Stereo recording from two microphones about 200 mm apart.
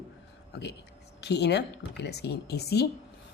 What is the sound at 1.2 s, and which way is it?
Speech, 55° left (ahead or behind).